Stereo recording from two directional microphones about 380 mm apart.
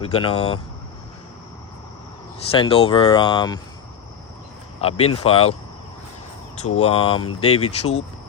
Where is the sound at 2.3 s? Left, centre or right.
Centre.